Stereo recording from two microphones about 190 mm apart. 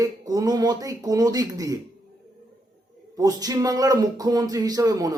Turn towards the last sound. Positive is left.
turn(degrees=-20)  # may be behind; listen again after turning